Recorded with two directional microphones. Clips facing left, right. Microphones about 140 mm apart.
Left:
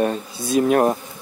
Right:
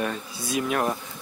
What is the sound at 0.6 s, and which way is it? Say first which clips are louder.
Bee: left 9 dB; 45° left (ahead or behind).